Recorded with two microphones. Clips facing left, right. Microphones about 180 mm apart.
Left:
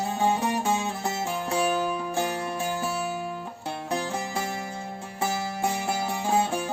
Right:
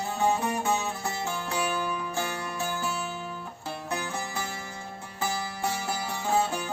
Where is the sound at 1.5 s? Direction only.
25° left (ahead or behind).